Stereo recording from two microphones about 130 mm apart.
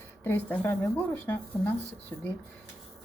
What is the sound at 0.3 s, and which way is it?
A woman's voice, 15° left (ahead or behind).